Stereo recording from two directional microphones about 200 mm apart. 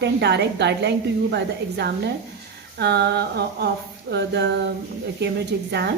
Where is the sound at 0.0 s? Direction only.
55° right (ahead or behind).